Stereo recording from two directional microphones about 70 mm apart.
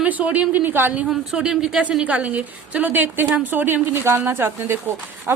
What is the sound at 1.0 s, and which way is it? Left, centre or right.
A woman's voice, centre.